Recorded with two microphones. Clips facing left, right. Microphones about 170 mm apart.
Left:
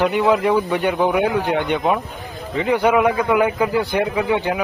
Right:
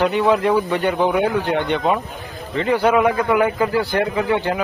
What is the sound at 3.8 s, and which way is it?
Speech, 15° left (ahead or behind).